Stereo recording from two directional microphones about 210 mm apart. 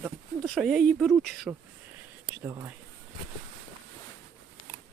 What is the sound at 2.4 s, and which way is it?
Speech, 10° right (ahead or behind).